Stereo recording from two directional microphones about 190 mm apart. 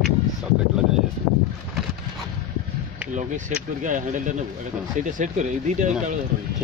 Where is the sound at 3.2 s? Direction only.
40° right (ahead or behind).